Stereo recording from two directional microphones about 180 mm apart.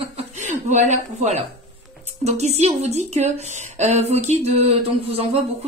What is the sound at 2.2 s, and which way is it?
Speech, 40° right (ahead or behind).